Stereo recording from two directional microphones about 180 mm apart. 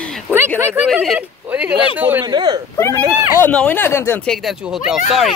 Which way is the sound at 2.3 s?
25° right (ahead or behind).